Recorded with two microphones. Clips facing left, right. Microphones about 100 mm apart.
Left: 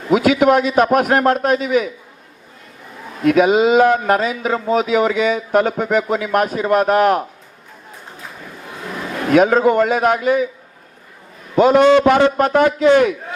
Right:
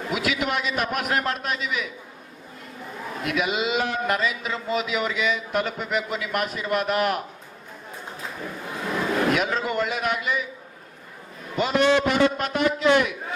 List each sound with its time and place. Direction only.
0.1 s a man's voice: 45° left (ahead or behind)
3.2 s a man's voice: 45° left (ahead or behind)
9.3 s a man's voice: 45° left (ahead or behind)
11.5 s a man's voice: 50° left (ahead or behind)